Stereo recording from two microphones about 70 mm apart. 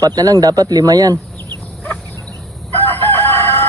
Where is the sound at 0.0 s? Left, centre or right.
Right.